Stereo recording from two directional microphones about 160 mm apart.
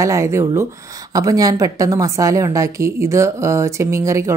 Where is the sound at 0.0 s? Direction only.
20° right (ahead or behind).